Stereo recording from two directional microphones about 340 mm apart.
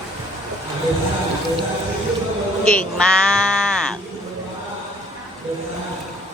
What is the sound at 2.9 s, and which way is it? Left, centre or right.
Music, centre.